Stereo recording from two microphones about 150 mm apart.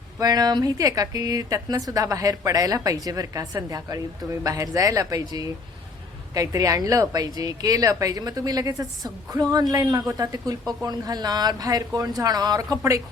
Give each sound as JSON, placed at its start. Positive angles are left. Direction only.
{"t": 0.2, "sound": "a woman's voice", "side_deg": -25}